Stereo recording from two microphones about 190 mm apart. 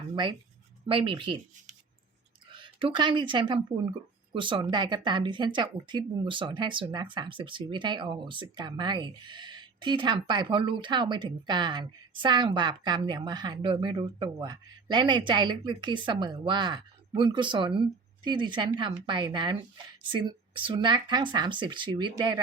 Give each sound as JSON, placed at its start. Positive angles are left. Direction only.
{"t": 0.9, "sound": "speech", "side_deg": -25}
{"t": 2.5, "sound": "speech", "side_deg": -25}